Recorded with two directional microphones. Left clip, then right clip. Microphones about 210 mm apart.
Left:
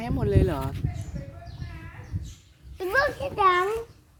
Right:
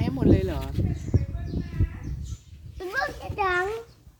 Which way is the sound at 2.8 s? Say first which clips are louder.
Left 5 dB; 10° left (ahead or behind).